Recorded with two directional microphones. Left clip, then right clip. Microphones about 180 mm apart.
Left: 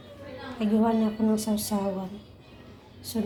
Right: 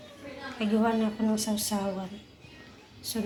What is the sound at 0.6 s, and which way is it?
A woman's voice, 5° left (ahead or behind).